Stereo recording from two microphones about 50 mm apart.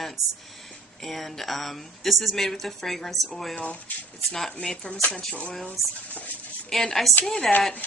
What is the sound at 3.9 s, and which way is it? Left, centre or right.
Speech, left.